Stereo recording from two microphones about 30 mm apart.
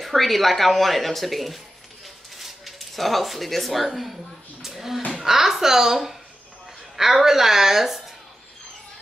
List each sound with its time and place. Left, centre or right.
0.0 s a woman's voice: centre
7.0 s a woman's voice: centre